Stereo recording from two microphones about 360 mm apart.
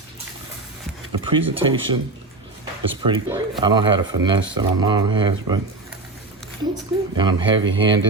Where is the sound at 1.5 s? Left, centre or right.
Centre.